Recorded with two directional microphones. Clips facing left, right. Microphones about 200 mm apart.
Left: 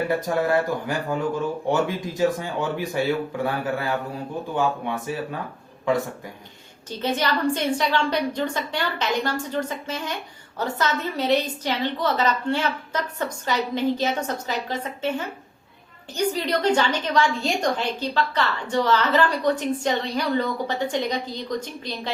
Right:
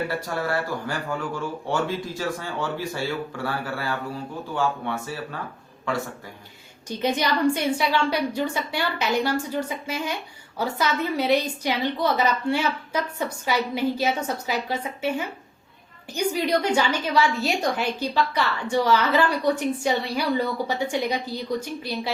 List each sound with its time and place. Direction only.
0.1 s speech: 20° left (ahead or behind)
7.0 s a woman's voice: 10° right (ahead or behind)